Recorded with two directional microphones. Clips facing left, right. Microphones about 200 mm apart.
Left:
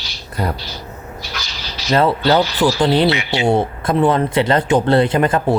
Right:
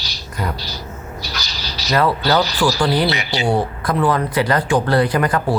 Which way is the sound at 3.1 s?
40° right (ahead or behind).